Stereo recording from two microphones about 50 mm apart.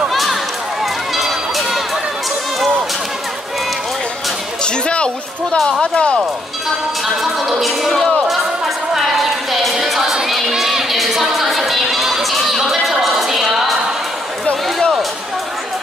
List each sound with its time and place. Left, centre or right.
0.1 s run: centre
4.6 s a sound: centre
5.6 s speech: centre
7.3 s speech: centre
7.9 s speech: centre
8.3 s music: centre
14.4 s a sound: centre